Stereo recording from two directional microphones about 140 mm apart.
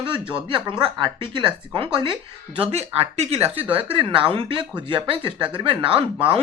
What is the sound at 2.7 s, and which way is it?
Speech, 50° right (ahead or behind).